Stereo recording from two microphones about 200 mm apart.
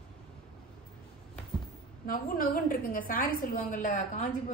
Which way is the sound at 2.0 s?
45° left (ahead or behind).